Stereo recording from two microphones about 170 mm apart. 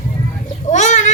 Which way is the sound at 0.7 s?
45° left (ahead or behind).